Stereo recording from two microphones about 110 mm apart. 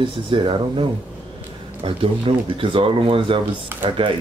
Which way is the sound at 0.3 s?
50° right (ahead or behind).